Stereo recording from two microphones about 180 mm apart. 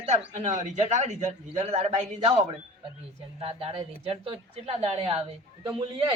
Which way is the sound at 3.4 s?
30° right (ahead or behind).